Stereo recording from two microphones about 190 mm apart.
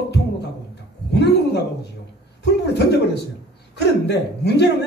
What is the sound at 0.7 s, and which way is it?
Speech, 65° left (ahead or behind).